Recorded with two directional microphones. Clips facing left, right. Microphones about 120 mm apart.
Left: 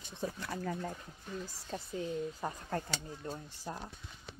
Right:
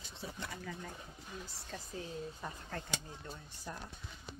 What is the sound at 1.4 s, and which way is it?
Speech, 30° left (ahead or behind).